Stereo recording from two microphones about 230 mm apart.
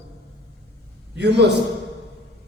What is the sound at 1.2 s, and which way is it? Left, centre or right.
Speech, right.